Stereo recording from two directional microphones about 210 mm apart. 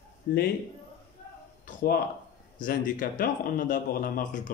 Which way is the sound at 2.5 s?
40° left (ahead or behind).